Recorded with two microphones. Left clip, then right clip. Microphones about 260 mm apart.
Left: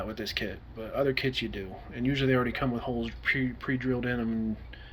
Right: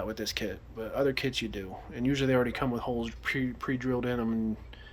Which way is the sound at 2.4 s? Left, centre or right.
Right.